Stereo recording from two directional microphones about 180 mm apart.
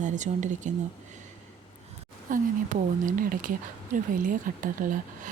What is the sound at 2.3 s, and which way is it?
A woman's voice, 50° right (ahead or behind).